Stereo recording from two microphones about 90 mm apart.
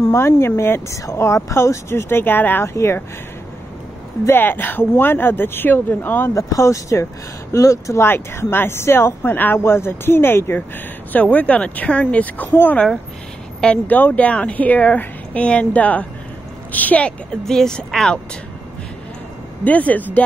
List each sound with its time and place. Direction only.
0.1 s speech: 30° left (ahead or behind)
4.3 s speech: 25° left (ahead or behind)
6.3 s speech: 35° left (ahead or behind)
11.1 s speech: 15° left (ahead or behind)
19.6 s speech: 15° left (ahead or behind)